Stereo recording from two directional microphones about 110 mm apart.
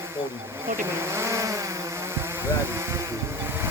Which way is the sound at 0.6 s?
20° right (ahead or behind).